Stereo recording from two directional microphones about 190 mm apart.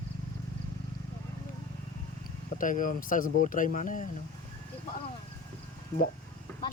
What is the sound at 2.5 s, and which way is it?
Speech, 45° left (ahead or behind).